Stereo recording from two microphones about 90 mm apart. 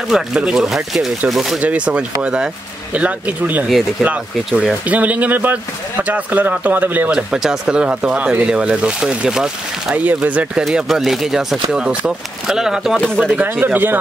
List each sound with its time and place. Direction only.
0.1 s speech: 5° right (ahead or behind)
1.6 s speech: 15° right (ahead or behind)
4.5 s speech: centre (ahead or behind)
4.8 s speech: 15° right (ahead or behind)
10.6 s speech: 5° right (ahead or behind)
13.2 s speech: 20° right (ahead or behind)